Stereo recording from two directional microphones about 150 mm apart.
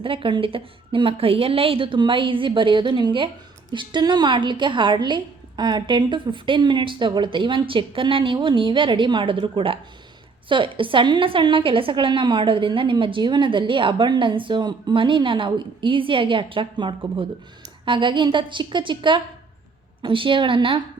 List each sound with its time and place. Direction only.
0.0 s a woman's voice: 35° right (ahead or behind)